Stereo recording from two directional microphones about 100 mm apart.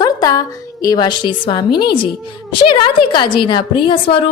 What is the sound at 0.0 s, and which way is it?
A woman's voice, 40° left (ahead or behind).